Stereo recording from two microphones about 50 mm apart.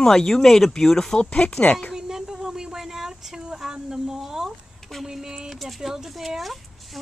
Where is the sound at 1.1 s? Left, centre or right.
Left.